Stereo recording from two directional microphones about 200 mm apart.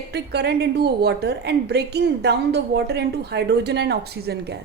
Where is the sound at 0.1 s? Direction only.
55° right (ahead or behind).